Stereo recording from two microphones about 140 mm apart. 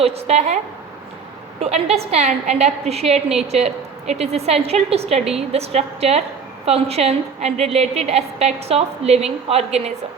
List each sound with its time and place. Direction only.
0.0 s a woman's voice: 50° right (ahead or behind)